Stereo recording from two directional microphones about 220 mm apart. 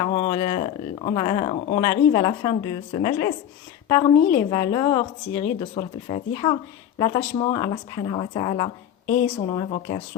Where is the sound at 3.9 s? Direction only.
20° left (ahead or behind).